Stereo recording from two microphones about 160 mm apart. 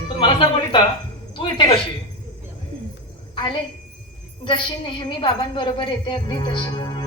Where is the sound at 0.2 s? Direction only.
30° left (ahead or behind).